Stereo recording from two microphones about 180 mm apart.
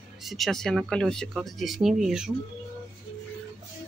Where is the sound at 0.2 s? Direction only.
Centre (ahead or behind).